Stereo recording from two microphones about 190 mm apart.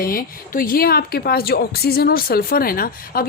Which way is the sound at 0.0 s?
50° left (ahead or behind).